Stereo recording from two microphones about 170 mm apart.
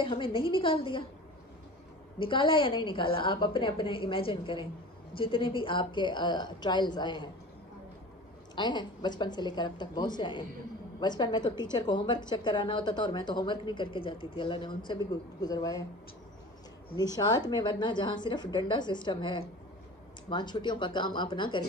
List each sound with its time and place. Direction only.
0.0 s a woman's voice: 30° left (ahead or behind)
2.1 s a woman's voice: 30° left (ahead or behind)
8.5 s a woman's voice: 25° left (ahead or behind)
16.9 s a woman's voice: 25° left (ahead or behind)